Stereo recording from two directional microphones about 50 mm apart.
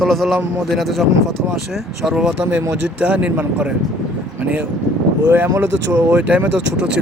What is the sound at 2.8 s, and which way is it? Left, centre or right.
Speech, right.